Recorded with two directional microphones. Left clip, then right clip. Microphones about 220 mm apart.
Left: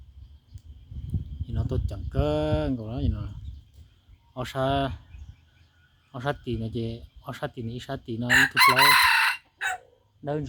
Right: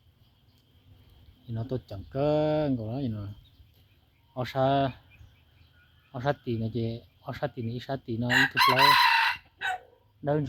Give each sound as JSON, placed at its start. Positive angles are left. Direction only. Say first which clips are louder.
{"t": 1.5, "sound": "speech", "louder": "even", "side_deg": 0}
{"t": 4.4, "sound": "speech", "louder": "right 1 dB", "side_deg": 0}
{"t": 6.1, "sound": "speech", "louder": "right 1 dB", "side_deg": 0}
{"t": 8.5, "sound": "crowing", "louder": "left 2 dB", "side_deg": 20}